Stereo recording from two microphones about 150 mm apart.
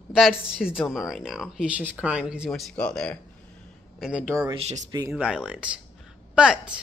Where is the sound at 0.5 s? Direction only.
Centre (ahead or behind).